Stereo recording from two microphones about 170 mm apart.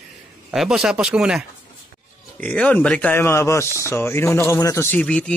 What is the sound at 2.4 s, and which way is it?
Speech, 5° left (ahead or behind).